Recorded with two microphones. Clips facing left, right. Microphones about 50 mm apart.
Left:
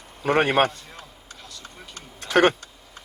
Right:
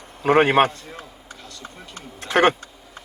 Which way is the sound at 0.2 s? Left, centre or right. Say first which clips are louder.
Right 4 dB; centre.